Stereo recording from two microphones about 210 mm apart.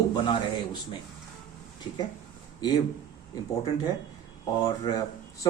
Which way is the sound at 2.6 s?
20° left (ahead or behind).